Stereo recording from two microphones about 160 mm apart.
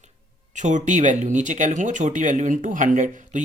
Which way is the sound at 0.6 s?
50° right (ahead or behind).